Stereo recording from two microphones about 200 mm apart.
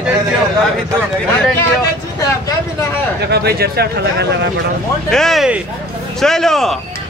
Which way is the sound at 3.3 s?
50° right (ahead or behind).